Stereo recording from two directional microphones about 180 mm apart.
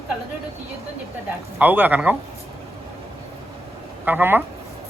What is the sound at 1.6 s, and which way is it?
Speech, 10° right (ahead or behind).